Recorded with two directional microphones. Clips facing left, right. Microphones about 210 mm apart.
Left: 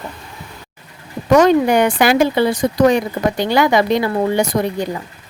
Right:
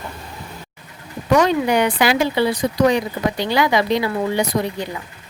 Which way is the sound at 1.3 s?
45° left (ahead or behind).